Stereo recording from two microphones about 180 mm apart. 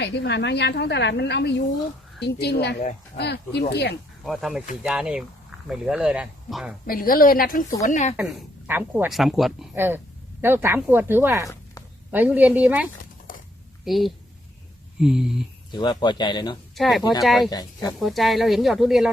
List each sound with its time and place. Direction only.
0.0 s a woman's voice: 70° left (ahead or behind)
4.3 s speech: centre (ahead or behind)
6.8 s a woman's voice: 50° left (ahead or behind)
7.8 s speech: 40° left (ahead or behind)
8.1 s a woman's voice: centre (ahead or behind)
9.7 s speech: 10° right (ahead or behind)
13.3 s a sound: 50° left (ahead or behind)
13.8 s speech: centre (ahead or behind)
15.7 s a man's voice: 25° left (ahead or behind)
16.7 s speech: centre (ahead or behind)
17.0 s a man's voice: 20° left (ahead or behind)
17.2 s speech: centre (ahead or behind)
17.5 s a man's voice: 20° left (ahead or behind)
18.0 s speech: centre (ahead or behind)